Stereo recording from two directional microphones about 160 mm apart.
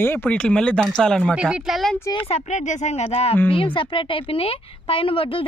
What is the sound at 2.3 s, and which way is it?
Speech, 45° left (ahead or behind).